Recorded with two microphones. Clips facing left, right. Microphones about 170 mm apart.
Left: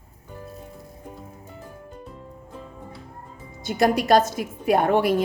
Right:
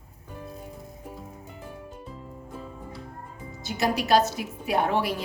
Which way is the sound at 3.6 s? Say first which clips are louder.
Left 6 dB; 50° left (ahead or behind).